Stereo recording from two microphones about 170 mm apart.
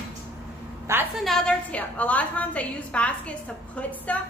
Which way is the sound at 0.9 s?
15° right (ahead or behind).